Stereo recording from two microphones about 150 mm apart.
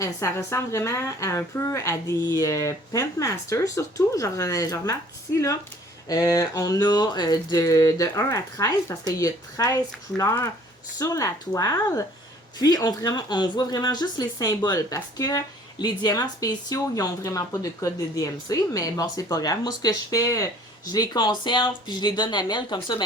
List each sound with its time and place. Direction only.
0.0 s speech: 20° left (ahead or behind)
6.1 s speech: 25° left (ahead or behind)